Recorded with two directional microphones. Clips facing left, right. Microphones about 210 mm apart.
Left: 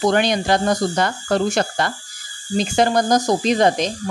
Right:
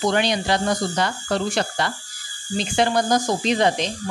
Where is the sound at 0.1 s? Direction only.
50° left (ahead or behind).